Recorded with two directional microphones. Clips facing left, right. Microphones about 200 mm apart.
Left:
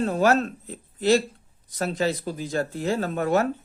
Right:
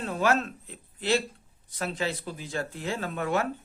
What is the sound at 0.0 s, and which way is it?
Speech, 40° left (ahead or behind).